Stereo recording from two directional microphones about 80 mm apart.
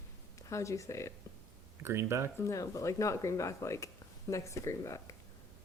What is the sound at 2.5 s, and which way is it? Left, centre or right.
A woman's voice, left.